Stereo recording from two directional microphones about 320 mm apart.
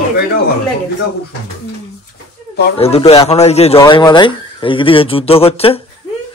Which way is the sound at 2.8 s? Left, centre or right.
Centre.